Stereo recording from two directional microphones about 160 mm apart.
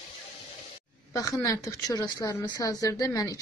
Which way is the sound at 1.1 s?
20° left (ahead or behind).